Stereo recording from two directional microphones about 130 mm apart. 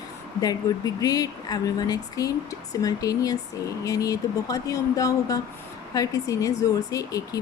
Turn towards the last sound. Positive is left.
turn(degrees=25)  # may be behind; listen again after turning